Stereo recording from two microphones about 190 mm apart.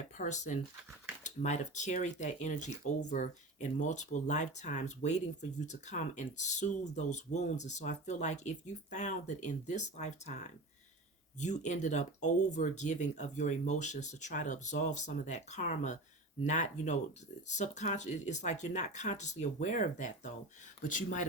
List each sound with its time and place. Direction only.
0.2 s speech: 40° left (ahead or behind)